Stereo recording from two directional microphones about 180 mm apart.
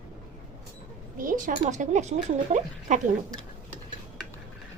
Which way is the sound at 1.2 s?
45° right (ahead or behind).